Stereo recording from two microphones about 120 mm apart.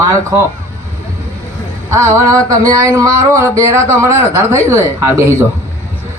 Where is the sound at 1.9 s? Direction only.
25° right (ahead or behind).